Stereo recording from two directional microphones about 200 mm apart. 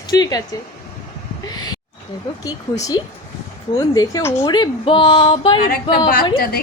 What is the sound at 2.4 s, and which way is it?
A woman's voice, 20° left (ahead or behind).